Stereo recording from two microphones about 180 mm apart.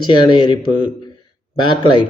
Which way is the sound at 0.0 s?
25° left (ahead or behind).